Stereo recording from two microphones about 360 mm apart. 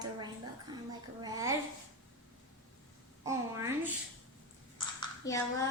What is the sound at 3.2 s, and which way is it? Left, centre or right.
Speech, centre.